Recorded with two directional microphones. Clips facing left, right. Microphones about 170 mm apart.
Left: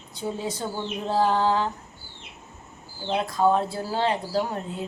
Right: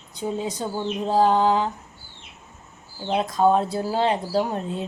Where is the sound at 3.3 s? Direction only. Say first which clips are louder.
Right 3 dB; 20° right (ahead or behind).